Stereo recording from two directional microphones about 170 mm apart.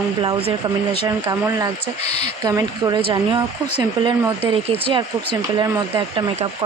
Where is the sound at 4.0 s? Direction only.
30° right (ahead or behind).